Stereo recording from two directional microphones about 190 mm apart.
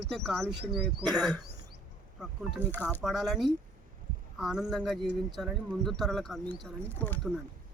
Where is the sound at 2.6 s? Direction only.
10° left (ahead or behind).